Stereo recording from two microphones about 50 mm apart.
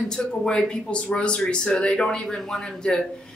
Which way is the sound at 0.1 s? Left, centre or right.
Centre.